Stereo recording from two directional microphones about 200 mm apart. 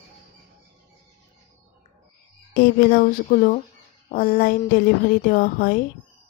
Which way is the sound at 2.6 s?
50° left (ahead or behind).